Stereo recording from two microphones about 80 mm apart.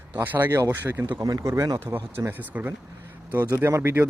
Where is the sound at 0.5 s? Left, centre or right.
Right.